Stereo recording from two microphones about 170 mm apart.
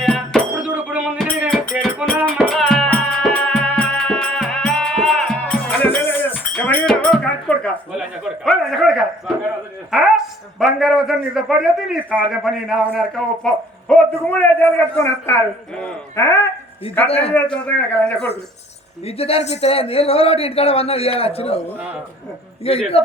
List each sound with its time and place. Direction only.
0.0 s music: 5° left (ahead or behind)
0.5 s a sound: 10° right (ahead or behind)
1.8 s music: centre (ahead or behind)
6.5 s a sound: 5° left (ahead or behind)
7.9 s a man's voice: 5° right (ahead or behind); by 16.5 s 20° left (ahead or behind)
17.1 s speech: 35° left (ahead or behind)
17.7 s speech: 10° left (ahead or behind)
19.0 s speech: 35° left (ahead or behind)
22.6 s speech: 35° left (ahead or behind)